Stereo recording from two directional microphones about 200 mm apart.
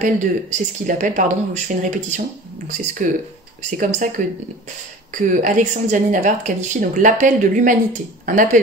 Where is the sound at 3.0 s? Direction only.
40° right (ahead or behind).